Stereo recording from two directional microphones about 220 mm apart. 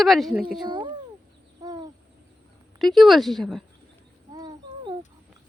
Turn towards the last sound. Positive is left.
turn(degrees=-15)  # may be behind; listen again after turning